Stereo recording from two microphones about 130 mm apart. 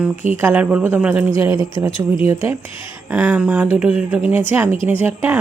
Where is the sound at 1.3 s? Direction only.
25° right (ahead or behind).